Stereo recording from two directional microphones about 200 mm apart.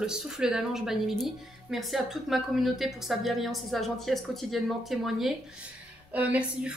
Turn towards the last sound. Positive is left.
turn(degrees=-5)  # may be behind; listen again after turning